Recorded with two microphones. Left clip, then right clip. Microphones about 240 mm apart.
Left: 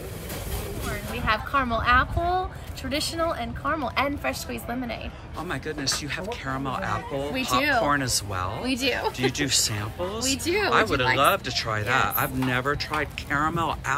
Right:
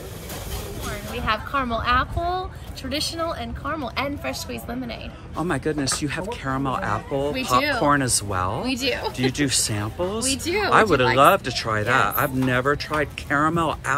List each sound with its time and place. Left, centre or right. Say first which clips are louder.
0.8 s speech: right 1 dB; centre
5.4 s speech: right 6 dB; centre
8.6 s speech: right 1 dB; centre